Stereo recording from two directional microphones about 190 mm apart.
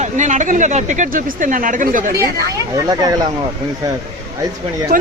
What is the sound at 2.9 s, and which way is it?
Speech, 20° right (ahead or behind).